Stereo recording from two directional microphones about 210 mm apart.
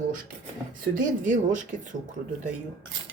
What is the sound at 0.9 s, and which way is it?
Speech, 40° right (ahead or behind).